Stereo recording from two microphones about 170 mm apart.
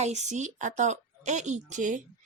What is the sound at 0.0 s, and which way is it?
Speech, 40° right (ahead or behind).